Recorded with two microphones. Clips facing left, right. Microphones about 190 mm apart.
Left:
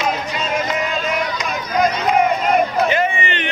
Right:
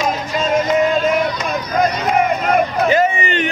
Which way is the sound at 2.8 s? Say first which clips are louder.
Right 4 dB; 40° right (ahead or behind).